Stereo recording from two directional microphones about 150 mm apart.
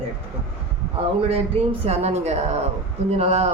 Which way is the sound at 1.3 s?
40° right (ahead or behind).